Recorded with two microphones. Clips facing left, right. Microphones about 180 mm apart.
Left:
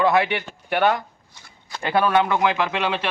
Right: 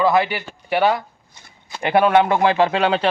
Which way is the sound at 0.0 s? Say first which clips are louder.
Right 2 dB; centre (ahead or behind).